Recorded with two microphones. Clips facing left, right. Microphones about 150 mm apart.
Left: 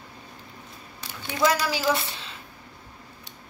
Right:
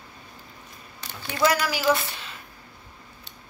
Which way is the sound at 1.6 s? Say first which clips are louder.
Right 2 dB; 30° left (ahead or behind).